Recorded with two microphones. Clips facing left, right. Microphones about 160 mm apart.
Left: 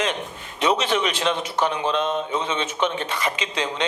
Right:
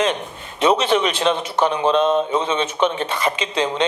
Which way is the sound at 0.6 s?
30° right (ahead or behind).